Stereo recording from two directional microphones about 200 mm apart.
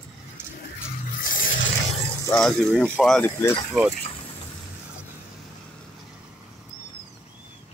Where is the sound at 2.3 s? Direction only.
5° left (ahead or behind).